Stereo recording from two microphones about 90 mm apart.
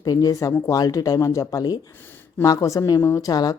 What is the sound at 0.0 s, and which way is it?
A woman's voice, 45° left (ahead or behind).